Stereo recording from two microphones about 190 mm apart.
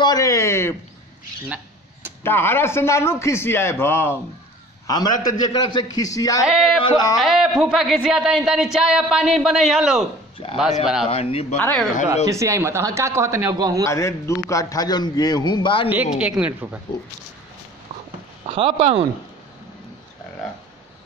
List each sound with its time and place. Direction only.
0.0 s a man's voice: 20° left (ahead or behind)
2.2 s a man's voice: 10° left (ahead or behind)
6.4 s speech: 5° right (ahead or behind)
6.8 s a man's voice: 20° left (ahead or behind)
7.2 s speech: centre (ahead or behind)
10.4 s a man's voice: 30° left (ahead or behind)
11.6 s a man's voice: 5° left (ahead or behind)
12.3 s speech: 15° right (ahead or behind)
13.8 s a man's voice: 15° left (ahead or behind)
15.9 s speech: 5° right (ahead or behind)
18.5 s speech: 30° right (ahead or behind)